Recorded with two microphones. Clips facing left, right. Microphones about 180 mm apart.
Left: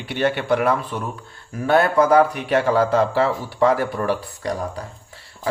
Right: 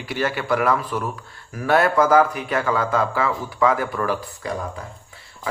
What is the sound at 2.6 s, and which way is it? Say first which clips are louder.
Speech: left 3 dB; 35° left (ahead or behind).